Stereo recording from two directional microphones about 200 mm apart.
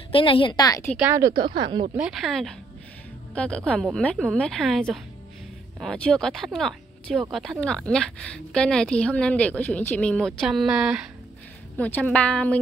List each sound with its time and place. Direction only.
0.1 s a woman's voice: 25° left (ahead or behind)
1.0 s speech: 15° right (ahead or behind)
2.0 s speech: centre (ahead or behind)
11.7 s a woman's voice: 10° left (ahead or behind)